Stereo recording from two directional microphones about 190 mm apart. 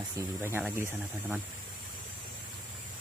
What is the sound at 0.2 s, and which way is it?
Speech, 10° right (ahead or behind).